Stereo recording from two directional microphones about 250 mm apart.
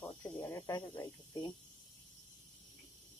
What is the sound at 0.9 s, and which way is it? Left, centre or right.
Speech, centre.